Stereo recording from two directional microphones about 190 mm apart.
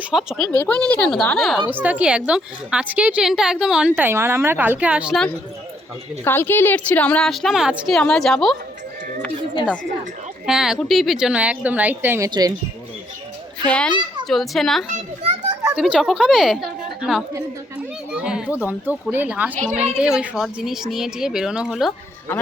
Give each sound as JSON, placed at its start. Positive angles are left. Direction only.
{"t": 0.0, "sound": "a woman's voice", "side_deg": -5}
{"t": 6.2, "sound": "a woman's voice", "side_deg": 10}
{"t": 10.4, "sound": "speech", "side_deg": -5}
{"t": 13.7, "sound": "a woman's voice", "side_deg": 5}
{"t": 14.8, "sound": "a child's voice", "side_deg": -35}
{"t": 15.7, "sound": "a woman's voice", "side_deg": -5}